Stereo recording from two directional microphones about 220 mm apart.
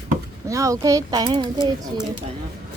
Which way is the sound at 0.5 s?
15° right (ahead or behind).